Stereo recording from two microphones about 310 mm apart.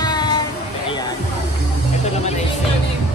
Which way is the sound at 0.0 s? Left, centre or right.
Centre.